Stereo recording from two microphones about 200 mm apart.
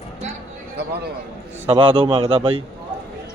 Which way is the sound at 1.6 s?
25° right (ahead or behind).